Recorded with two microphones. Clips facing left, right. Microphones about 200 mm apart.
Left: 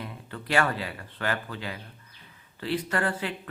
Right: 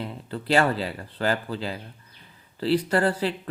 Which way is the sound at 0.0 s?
30° right (ahead or behind).